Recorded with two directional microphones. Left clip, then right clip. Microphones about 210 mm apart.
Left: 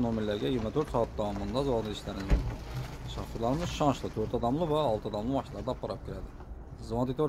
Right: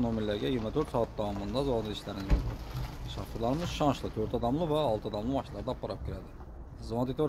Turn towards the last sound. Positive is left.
turn(degrees=0)  # may be behind; listen again after turning